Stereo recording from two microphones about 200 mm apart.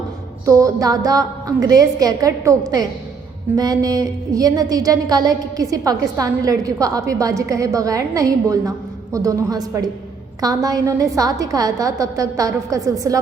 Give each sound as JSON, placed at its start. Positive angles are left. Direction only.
{"t": 0.4, "sound": "a woman's voice", "side_deg": -15}